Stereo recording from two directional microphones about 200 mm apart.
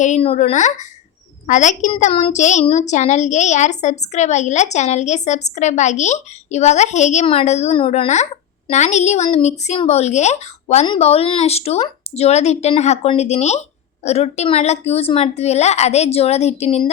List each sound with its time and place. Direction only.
0.0 s a woman's voice: 35° left (ahead or behind)